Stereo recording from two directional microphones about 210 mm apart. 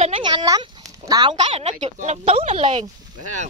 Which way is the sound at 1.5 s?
30° right (ahead or behind).